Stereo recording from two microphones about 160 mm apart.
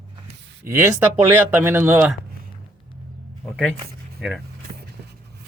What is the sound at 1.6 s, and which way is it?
Speech, 15° right (ahead or behind).